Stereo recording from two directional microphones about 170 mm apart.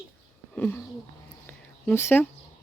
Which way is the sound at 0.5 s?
10° left (ahead or behind).